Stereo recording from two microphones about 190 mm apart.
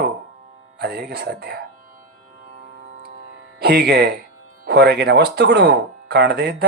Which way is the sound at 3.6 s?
60° right (ahead or behind).